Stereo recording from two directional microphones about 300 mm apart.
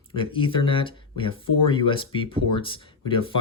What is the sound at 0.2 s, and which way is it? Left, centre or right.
Speech, centre.